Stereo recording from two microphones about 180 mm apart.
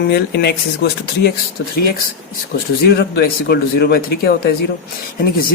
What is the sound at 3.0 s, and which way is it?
Speech, 60° left (ahead or behind).